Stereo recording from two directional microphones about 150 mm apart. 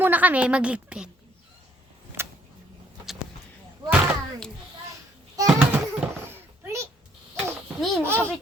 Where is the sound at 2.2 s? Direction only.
15° right (ahead or behind).